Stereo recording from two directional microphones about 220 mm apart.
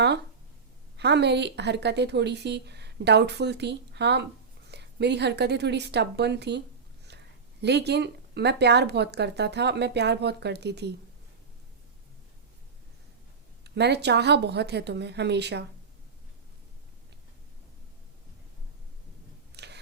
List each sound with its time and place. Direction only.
0.9 s a woman's voice: 50° right (ahead or behind)
13.7 s a woman's voice: 50° right (ahead or behind)
19.5 s a sound: 50° right (ahead or behind)